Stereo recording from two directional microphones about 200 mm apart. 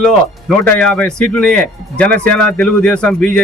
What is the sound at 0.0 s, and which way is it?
A man's voice, 5° left (ahead or behind).